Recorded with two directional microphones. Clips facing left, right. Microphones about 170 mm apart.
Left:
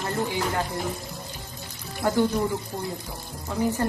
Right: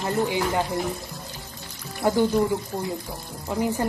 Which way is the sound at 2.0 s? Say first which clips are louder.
Right 2 dB; 10° right (ahead or behind).